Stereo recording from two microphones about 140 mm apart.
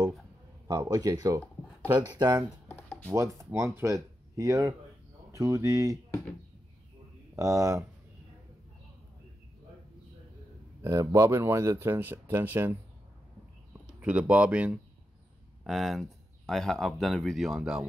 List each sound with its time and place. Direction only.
0.7 s speech: 25° right (ahead or behind)
2.7 s a sound: 15° left (ahead or behind)
3.3 s speech: 20° right (ahead or behind)
7.3 s speech: 25° right (ahead or behind)
10.8 s speech: 20° right (ahead or behind)
14.0 s speech: 10° right (ahead or behind)